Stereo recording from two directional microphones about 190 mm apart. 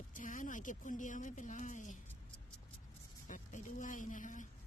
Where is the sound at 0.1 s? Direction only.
45° left (ahead or behind).